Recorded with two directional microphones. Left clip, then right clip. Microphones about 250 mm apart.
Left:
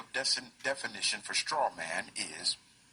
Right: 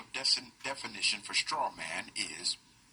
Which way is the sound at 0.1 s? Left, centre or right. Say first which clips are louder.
Right 1 dB; left.